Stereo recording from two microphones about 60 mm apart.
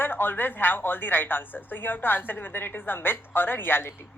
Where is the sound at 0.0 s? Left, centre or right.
Left.